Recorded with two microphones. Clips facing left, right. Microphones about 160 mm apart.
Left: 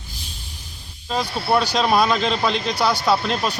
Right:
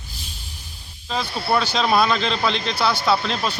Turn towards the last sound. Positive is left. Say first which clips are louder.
# left 1 dB
turn(degrees=10)  # may be behind; listen again after turning